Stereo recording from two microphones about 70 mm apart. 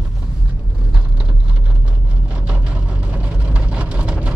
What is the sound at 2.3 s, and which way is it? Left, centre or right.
Vehicle, centre.